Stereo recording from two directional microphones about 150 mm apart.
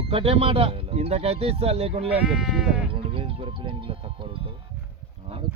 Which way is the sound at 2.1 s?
5° right (ahead or behind).